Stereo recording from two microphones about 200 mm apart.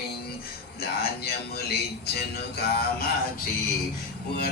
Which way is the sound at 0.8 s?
50° left (ahead or behind).